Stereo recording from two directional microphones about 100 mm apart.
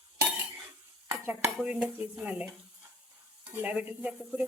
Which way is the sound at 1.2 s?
15° right (ahead or behind).